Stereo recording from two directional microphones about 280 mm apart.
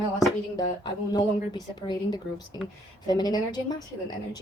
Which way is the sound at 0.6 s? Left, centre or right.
Centre.